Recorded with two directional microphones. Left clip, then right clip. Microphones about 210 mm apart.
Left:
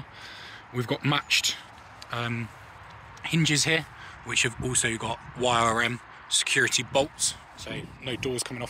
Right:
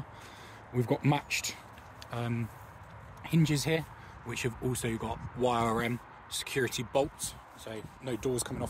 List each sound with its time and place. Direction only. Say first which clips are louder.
0.7 s speech: left 3 dB; 10° right (ahead or behind)